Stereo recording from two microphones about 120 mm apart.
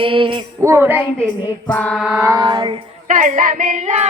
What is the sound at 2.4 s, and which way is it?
Female singing, 35° right (ahead or behind).